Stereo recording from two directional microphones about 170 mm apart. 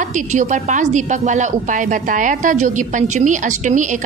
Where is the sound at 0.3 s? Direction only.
45° right (ahead or behind).